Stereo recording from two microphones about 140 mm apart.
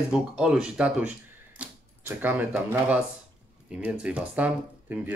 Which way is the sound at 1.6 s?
10° right (ahead or behind).